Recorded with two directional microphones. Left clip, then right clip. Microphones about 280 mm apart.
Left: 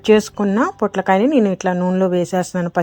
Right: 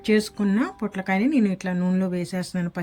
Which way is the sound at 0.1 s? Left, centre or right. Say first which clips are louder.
Left 8 dB; left.